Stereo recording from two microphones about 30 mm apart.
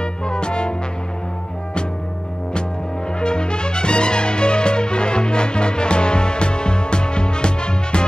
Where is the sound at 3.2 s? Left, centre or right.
Left.